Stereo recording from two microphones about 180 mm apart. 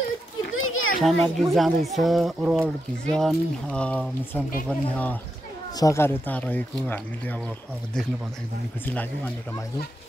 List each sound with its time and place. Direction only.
0.6 s children playing: 90° left
1.0 s speech: centre (ahead or behind)
8.8 s speech: 10° left (ahead or behind)